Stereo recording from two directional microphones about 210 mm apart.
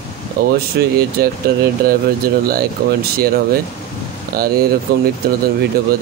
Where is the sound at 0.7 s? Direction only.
50° right (ahead or behind).